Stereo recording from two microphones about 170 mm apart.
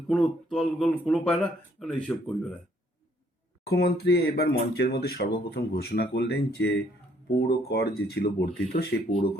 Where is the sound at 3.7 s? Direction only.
70° left (ahead or behind).